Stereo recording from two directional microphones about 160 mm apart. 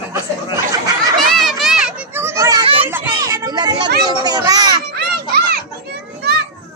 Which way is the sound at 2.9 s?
15° right (ahead or behind).